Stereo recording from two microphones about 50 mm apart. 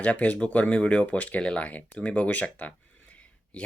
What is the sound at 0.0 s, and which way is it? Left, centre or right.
Speech, left.